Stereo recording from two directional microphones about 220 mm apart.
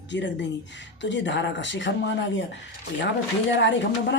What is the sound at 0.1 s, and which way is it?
Speech, 55° left (ahead or behind).